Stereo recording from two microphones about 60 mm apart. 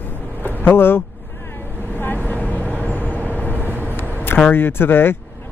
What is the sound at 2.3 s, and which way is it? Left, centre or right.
Vehicle, left.